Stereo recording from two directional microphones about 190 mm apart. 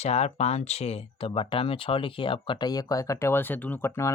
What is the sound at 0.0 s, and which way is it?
Speech, 35° left (ahead or behind).